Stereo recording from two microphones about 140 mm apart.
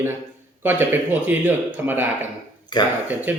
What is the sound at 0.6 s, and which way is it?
Speech, 15° right (ahead or behind).